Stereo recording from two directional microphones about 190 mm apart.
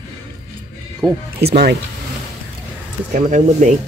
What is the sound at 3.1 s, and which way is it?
Speech, 40° right (ahead or behind).